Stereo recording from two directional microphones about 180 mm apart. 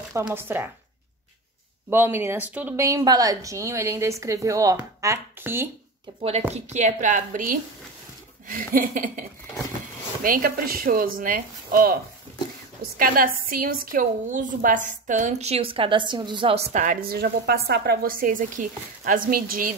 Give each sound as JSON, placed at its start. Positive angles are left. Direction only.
{"t": 0.1, "sound": "a woman's voice", "side_deg": -15}
{"t": 1.9, "sound": "a woman's voice", "side_deg": -10}
{"t": 6.5, "sound": "a woman's voice", "side_deg": -40}
{"t": 10.2, "sound": "a woman's voice", "side_deg": -50}